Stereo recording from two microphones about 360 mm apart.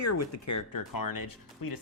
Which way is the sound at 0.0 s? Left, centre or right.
Left.